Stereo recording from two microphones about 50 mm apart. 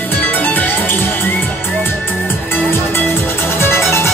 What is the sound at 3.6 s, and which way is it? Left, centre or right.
Music, left.